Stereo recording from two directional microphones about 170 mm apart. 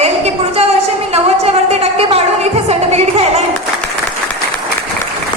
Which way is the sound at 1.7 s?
35° right (ahead or behind).